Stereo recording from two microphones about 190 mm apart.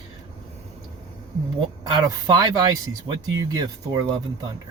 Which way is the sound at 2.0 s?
20° right (ahead or behind).